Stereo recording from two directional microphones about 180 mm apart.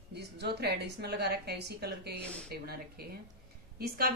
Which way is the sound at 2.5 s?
60° right (ahead or behind).